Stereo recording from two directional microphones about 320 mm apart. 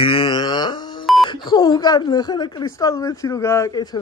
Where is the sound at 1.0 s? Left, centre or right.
Centre.